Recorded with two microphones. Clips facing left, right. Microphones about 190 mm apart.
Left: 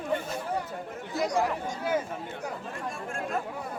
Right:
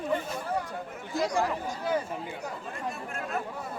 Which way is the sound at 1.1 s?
5° left (ahead or behind).